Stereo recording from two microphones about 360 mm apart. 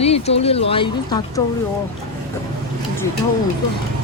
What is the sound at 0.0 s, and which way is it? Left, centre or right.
Speech, centre.